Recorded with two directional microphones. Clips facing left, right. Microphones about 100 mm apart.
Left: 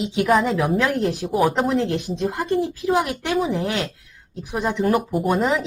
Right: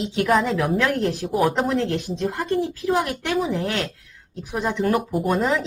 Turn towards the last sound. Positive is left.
turn(degrees=10)  # may be behind; listen again after turning